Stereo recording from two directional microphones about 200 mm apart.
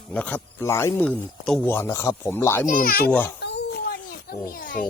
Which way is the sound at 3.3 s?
60° left (ahead or behind).